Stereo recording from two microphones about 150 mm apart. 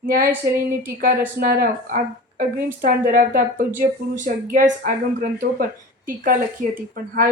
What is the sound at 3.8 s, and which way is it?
Speech, 60° right (ahead or behind).